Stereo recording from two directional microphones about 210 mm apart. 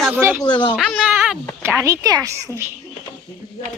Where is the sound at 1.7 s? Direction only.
15° right (ahead or behind).